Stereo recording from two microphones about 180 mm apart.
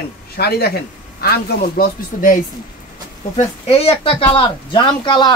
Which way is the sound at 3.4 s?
35° left (ahead or behind).